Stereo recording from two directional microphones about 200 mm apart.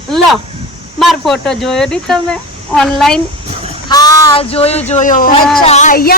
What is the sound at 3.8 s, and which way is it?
Speech, 20° left (ahead or behind).